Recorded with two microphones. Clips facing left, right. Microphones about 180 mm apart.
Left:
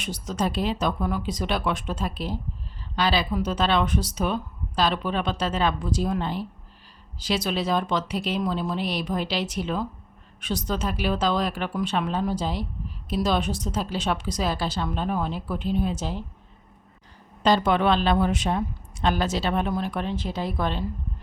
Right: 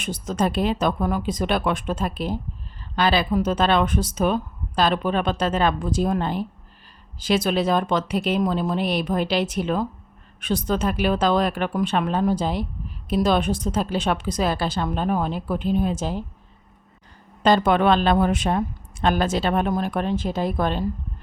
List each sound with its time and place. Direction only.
0.0 s a woman's voice: 50° right (ahead or behind)
17.4 s speech: 55° right (ahead or behind)